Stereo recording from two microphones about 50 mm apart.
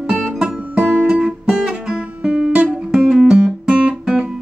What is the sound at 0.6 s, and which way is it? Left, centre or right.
Music, right.